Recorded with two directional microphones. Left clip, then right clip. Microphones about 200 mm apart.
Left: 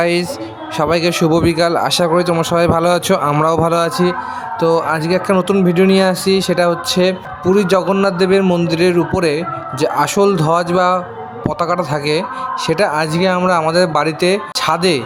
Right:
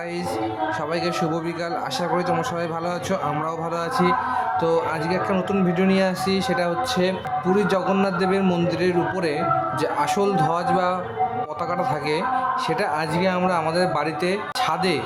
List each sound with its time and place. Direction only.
0.8 s speech: 35° left (ahead or behind)
13.4 s speech: 20° left (ahead or behind)
13.7 s speech: 30° left (ahead or behind)